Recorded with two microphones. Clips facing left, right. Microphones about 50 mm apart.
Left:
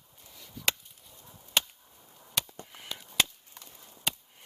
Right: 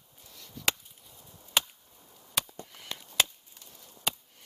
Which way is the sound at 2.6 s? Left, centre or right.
Centre.